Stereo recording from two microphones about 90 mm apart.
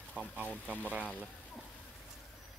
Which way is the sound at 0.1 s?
15° left (ahead or behind).